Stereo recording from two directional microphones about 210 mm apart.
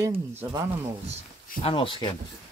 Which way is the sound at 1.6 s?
25° left (ahead or behind).